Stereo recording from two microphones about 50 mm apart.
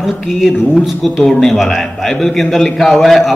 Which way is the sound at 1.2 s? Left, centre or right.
Centre.